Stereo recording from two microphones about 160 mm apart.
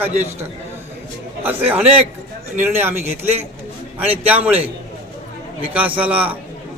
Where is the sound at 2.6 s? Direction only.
15° right (ahead or behind).